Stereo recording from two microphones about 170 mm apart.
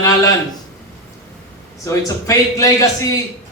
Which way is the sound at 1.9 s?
20° left (ahead or behind).